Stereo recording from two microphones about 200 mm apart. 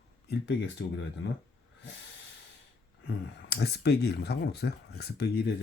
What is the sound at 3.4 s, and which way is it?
Speech, 55° left (ahead or behind).